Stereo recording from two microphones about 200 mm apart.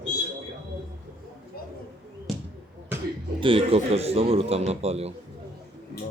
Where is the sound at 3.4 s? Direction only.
25° right (ahead or behind).